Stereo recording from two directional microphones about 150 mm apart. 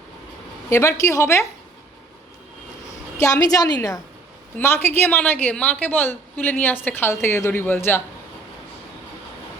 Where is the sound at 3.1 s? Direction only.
20° left (ahead or behind).